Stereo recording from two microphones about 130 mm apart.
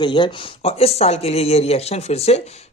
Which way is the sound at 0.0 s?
35° left (ahead or behind).